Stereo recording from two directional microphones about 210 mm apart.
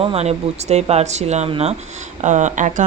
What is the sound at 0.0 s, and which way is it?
Speech, 30° right (ahead or behind).